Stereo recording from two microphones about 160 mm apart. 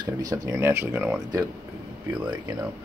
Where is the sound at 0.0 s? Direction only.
25° right (ahead or behind).